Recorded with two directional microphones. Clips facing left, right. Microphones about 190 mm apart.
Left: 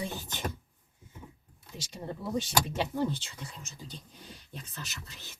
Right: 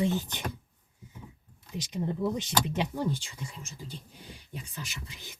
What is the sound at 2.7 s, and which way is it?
Speech, 10° right (ahead or behind).